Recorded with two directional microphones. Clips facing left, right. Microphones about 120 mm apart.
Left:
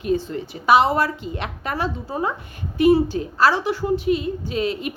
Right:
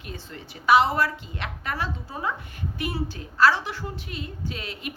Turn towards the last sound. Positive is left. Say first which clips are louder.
# left 11 dB
turn(degrees=20)  # may be behind; listen again after turning